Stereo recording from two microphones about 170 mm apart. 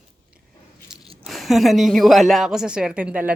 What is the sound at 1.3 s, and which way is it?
A woman's voice, centre (ahead or behind).